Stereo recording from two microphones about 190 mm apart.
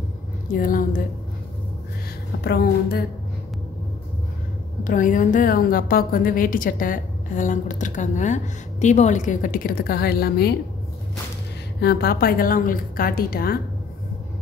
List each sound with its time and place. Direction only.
0.5 s a woman's voice: 45° left (ahead or behind)
2.4 s speech: 55° left (ahead or behind)
4.8 s a woman's voice: 45° left (ahead or behind)
11.8 s a woman's voice: 55° left (ahead or behind)